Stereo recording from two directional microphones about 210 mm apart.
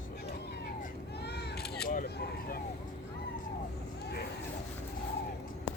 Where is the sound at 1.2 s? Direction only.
50° left (ahead or behind).